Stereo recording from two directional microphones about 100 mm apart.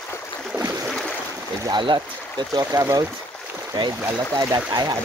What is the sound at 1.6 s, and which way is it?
Speech, 50° right (ahead or behind).